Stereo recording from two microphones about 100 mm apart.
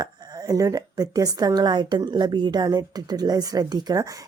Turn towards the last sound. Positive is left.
turn(degrees=-35)  # may be behind; listen again after turning